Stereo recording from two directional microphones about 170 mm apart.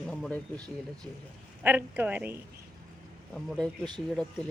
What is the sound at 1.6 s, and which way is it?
Speech, 10° right (ahead or behind).